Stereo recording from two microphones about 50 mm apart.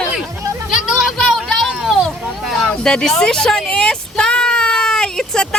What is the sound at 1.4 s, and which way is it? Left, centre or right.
Children playing, centre.